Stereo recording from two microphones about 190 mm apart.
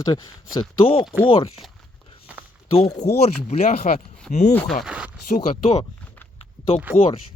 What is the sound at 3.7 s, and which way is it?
Speech, 50° left (ahead or behind).